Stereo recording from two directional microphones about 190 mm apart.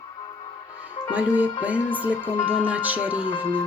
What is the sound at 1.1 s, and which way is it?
Speech, 10° right (ahead or behind).